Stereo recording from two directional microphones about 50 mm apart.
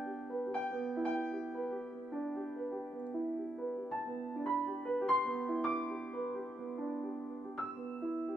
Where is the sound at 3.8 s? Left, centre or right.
Centre.